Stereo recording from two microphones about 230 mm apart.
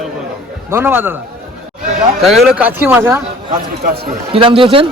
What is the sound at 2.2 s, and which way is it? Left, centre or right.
Speech, centre.